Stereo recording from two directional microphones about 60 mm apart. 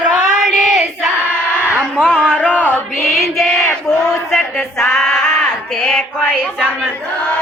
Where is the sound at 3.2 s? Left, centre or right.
Centre.